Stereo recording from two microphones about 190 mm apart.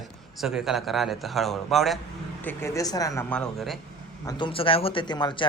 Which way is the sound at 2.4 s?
10° left (ahead or behind).